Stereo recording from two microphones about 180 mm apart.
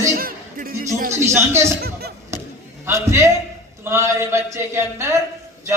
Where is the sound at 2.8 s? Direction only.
15° right (ahead or behind).